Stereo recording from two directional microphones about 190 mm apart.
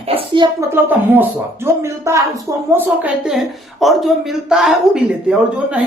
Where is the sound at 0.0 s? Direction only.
25° right (ahead or behind).